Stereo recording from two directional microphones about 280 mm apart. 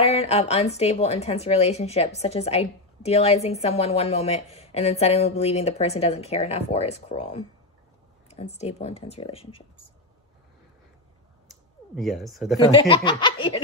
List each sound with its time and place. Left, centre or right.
0.0 s a woman's voice: left
12.0 s speech: centre
12.5 s speech: centre